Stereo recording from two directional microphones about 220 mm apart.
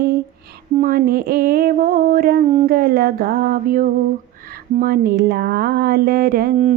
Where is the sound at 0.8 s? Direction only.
40° right (ahead or behind).